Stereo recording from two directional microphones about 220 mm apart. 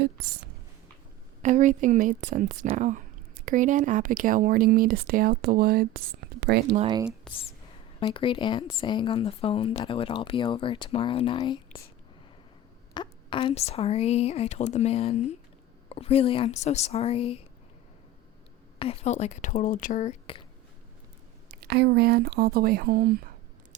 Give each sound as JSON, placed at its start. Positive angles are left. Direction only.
{"t": 1.4, "sound": "speech", "side_deg": -35}
{"t": 6.7, "sound": "speech", "side_deg": -25}
{"t": 7.3, "sound": "speech", "side_deg": 5}
{"t": 7.9, "sound": "speech", "side_deg": 25}
{"t": 12.9, "sound": "speech", "side_deg": 20}
{"t": 18.8, "sound": "speech", "side_deg": 30}
{"t": 21.7, "sound": "speech", "side_deg": -50}